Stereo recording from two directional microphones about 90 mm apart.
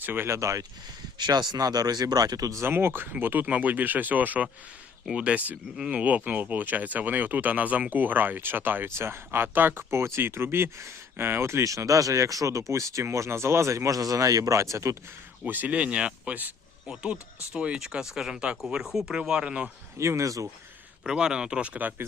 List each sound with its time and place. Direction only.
0.0 s speech: 25° right (ahead or behind)
0.3 s speech: 40° right (ahead or behind)
1.2 s speech: 55° right (ahead or behind)
2.6 s speech: 25° right (ahead or behind)
15.4 s speech: 20° right (ahead or behind)
20.0 s speech: 35° right (ahead or behind)
21.0 s speech: 10° right (ahead or behind)